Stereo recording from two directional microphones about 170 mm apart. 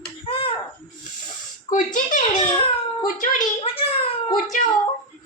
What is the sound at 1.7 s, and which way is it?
A child's voice, 50° left (ahead or behind).